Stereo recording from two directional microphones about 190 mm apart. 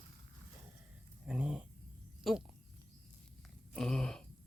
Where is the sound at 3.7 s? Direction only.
5° left (ahead or behind).